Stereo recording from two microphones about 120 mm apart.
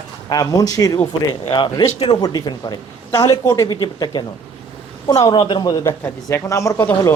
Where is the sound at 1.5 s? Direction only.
40° left (ahead or behind).